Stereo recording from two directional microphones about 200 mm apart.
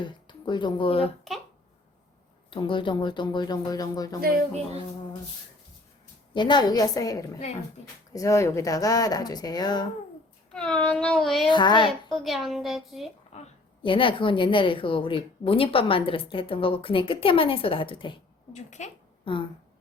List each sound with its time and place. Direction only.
0.0 s speech: 25° left (ahead or behind)
2.5 s a woman's voice: 25° left (ahead or behind)
4.2 s speech: 50° right (ahead or behind)
6.3 s a woman's voice: 20° left (ahead or behind)
10.5 s child singing: 5° left (ahead or behind)
11.4 s a woman's voice: 25° left (ahead or behind)
12.1 s child singing: centre (ahead or behind)
13.3 s a woman's voice: 35° left (ahead or behind)